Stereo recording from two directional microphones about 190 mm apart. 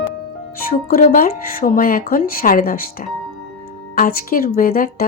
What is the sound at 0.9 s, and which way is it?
A woman's voice, 45° left (ahead or behind).